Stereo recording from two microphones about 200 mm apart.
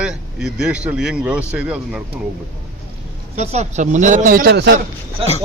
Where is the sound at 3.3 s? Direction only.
35° right (ahead or behind); by 4.8 s 55° right (ahead or behind).